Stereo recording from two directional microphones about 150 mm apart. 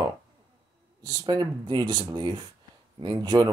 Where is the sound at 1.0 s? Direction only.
25° right (ahead or behind).